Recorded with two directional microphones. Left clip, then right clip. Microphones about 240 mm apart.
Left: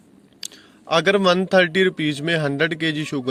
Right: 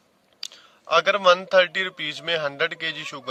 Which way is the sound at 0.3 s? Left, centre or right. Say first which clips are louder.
Left 1 dB; centre.